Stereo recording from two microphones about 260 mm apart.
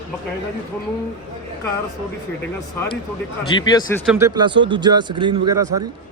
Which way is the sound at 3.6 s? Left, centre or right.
Centre.